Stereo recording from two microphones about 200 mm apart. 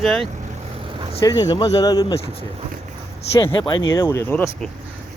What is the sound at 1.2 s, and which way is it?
Speech, 20° left (ahead or behind).